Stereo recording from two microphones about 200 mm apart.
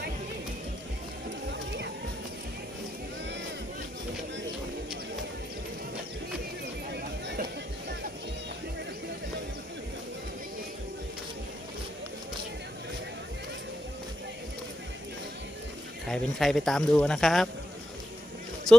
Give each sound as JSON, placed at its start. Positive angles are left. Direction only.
{"t": 1.5, "sound": "music", "side_deg": -60}
{"t": 6.9, "sound": "a sound", "side_deg": -55}
{"t": 16.0, "sound": "speech", "side_deg": 0}